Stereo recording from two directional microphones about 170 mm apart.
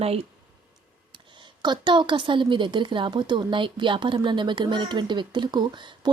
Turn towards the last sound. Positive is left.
turn(degrees=-25)  # may be behind; listen again after turning